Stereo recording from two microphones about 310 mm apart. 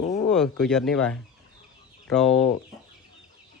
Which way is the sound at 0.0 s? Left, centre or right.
Left.